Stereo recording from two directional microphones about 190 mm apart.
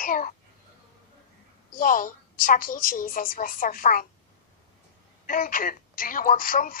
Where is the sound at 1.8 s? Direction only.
45° left (ahead or behind).